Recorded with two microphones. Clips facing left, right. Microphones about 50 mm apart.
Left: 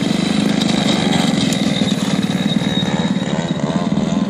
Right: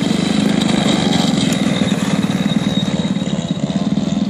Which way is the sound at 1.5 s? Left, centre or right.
Centre.